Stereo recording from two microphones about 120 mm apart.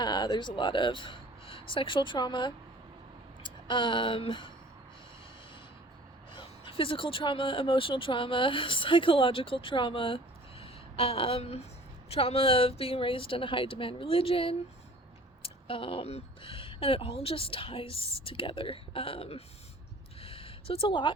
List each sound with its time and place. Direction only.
0.0 s speech: 40° left (ahead or behind)
6.3 s speech: 45° left (ahead or behind)
20.2 s a sound: 50° left (ahead or behind)